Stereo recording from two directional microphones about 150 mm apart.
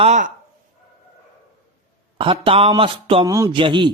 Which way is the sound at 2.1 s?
35° right (ahead or behind).